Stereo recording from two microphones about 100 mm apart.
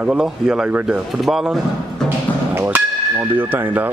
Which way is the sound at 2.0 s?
20° right (ahead or behind).